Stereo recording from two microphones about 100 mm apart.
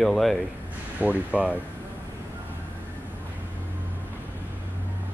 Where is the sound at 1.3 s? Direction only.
15° right (ahead or behind).